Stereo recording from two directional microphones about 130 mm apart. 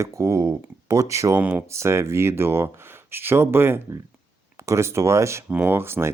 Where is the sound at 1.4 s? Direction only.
15° right (ahead or behind).